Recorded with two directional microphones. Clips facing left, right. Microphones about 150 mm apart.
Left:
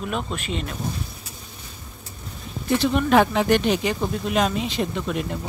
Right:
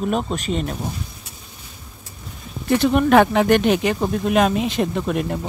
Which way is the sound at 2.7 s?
55° right (ahead or behind).